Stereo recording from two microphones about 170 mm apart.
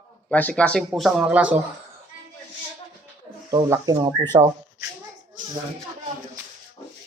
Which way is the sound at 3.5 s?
20° right (ahead or behind).